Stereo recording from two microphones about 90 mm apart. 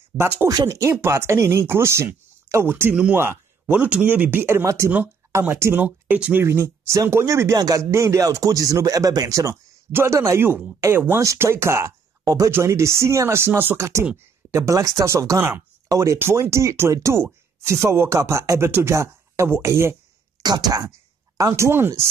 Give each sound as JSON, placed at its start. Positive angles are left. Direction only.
{"t": 0.2, "sound": "speech", "side_deg": -25}
{"t": 20.4, "sound": "speech", "side_deg": -45}
{"t": 21.4, "sound": "speech", "side_deg": -35}